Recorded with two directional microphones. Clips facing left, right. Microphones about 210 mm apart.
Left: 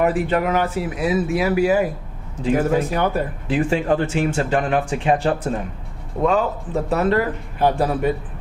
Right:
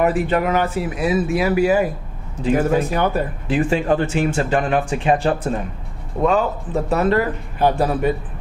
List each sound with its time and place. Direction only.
0.0 s a man's voice: 15° right (ahead or behind)